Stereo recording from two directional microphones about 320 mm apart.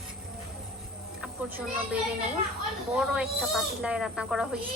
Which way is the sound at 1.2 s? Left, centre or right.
Centre.